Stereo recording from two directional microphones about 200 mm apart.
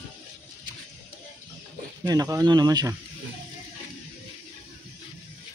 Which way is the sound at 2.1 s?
15° right (ahead or behind).